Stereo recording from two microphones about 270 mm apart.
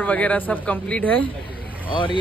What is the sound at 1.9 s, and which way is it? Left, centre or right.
Speech, centre.